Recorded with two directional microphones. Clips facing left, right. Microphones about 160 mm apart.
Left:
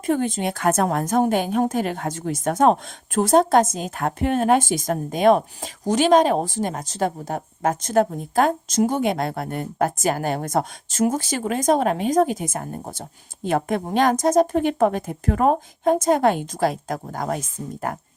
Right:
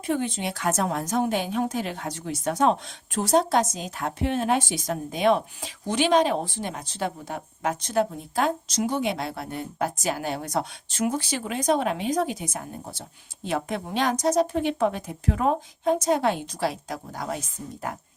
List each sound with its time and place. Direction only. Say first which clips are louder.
0.0 s a woman's voice: left 5 dB; 45° left (ahead or behind)